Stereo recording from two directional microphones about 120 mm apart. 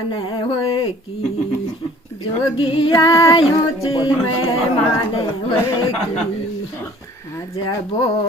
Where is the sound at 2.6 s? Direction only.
50° left (ahead or behind).